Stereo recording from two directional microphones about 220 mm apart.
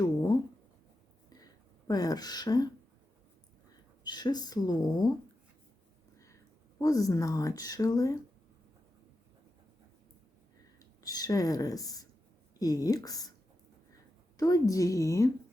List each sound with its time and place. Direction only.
1.9 s speech: 15° left (ahead or behind)
4.0 s speech: 20° left (ahead or behind)
6.7 s speech: 15° left (ahead or behind)
10.8 s speech: 15° left (ahead or behind)
14.3 s speech: 15° left (ahead or behind)